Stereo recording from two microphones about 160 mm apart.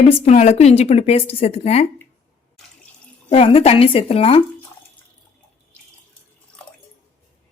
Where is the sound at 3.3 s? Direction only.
40° left (ahead or behind).